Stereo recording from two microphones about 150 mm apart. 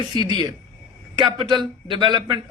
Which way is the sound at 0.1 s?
30° right (ahead or behind).